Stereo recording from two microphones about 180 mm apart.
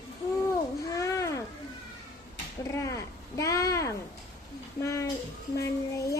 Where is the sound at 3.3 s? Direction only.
15° left (ahead or behind).